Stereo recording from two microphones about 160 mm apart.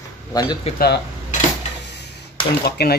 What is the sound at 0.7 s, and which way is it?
Speech, 40° left (ahead or behind).